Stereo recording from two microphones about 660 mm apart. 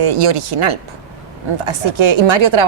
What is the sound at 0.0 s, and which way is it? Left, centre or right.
A woman's voice, right.